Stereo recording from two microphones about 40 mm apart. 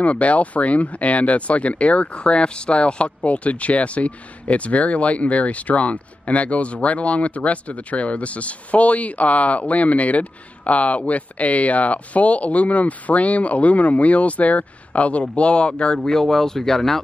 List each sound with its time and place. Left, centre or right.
0.0 s speech: left
16.1 s speech: centre